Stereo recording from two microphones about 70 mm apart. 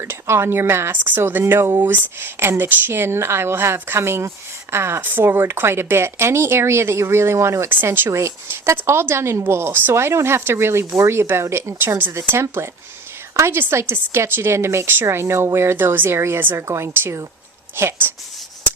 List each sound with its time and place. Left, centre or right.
0.0 s speech: right
7.7 s speech: right
8.1 s speech: right
16.4 s speech: right